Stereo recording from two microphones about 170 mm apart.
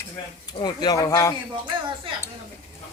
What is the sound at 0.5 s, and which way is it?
Speech, 25° left (ahead or behind).